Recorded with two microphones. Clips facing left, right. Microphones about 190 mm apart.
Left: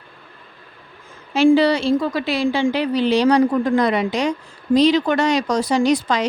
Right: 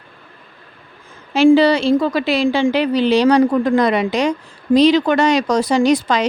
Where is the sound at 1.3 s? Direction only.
90° right.